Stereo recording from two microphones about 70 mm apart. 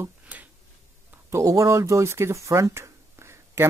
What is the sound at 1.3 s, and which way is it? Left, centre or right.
Speech, right.